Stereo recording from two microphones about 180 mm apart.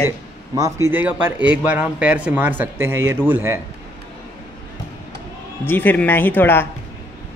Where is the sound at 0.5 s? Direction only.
20° right (ahead or behind).